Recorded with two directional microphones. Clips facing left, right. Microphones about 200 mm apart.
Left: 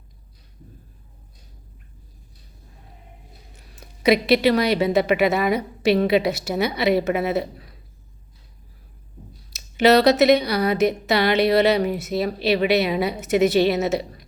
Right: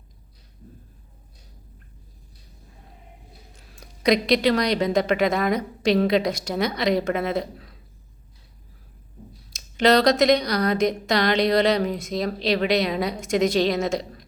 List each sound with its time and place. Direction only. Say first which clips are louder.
3.5 s speech: left 1 dB; centre (ahead or behind)
9.5 s speech: left 3 dB; 5° left (ahead or behind)